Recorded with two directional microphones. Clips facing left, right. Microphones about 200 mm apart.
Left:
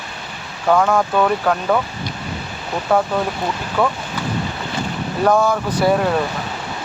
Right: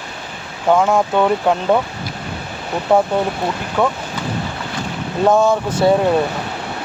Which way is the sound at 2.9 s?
20° right (ahead or behind).